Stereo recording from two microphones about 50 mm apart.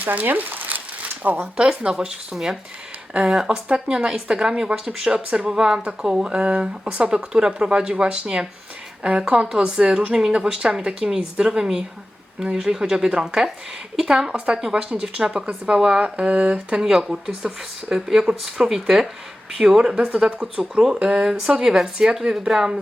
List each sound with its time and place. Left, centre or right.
0.0 s speech: right
1.5 s speech: centre
16.8 s speech: centre